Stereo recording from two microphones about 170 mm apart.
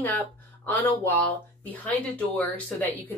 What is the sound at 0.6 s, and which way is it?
A woman's voice, 10° left (ahead or behind).